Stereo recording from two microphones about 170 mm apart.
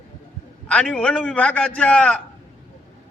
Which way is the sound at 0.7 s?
5° left (ahead or behind).